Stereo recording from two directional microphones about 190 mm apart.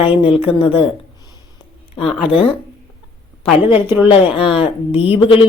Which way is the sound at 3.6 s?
10° right (ahead or behind).